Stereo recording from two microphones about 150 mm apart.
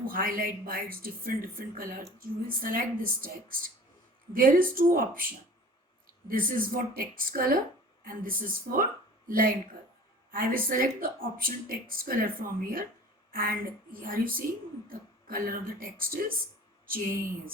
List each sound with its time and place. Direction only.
0.0 s speech: 70° right (ahead or behind)